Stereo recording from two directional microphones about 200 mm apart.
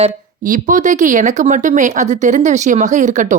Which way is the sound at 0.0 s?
40° right (ahead or behind).